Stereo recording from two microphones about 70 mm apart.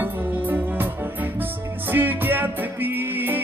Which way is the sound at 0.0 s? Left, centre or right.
Right.